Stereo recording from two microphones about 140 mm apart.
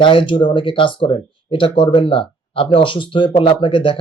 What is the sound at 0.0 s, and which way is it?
Speech, 35° left (ahead or behind).